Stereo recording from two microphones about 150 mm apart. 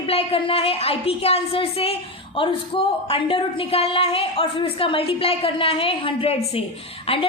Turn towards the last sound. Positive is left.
turn(degrees=40)  # may be behind; listen again after turning